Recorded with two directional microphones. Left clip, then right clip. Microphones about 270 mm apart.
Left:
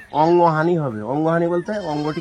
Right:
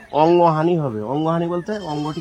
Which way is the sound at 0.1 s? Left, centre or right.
Centre.